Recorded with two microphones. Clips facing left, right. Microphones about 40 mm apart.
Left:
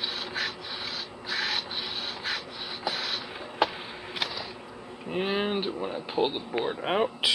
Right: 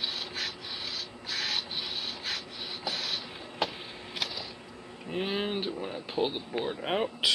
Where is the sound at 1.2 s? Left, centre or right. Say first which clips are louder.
Left 3 dB; centre.